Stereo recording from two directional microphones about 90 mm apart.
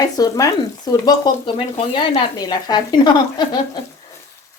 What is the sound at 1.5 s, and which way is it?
Speech, 70° left (ahead or behind).